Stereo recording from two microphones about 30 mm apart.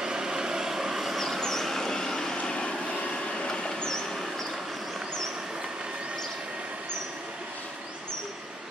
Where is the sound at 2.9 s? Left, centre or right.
Left.